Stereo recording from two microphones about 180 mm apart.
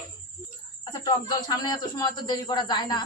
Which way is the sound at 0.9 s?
25° left (ahead or behind).